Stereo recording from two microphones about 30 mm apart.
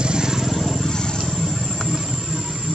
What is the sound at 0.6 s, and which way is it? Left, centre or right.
Vehicle, centre.